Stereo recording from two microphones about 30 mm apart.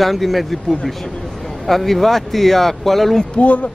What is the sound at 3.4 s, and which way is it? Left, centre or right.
Speech, left.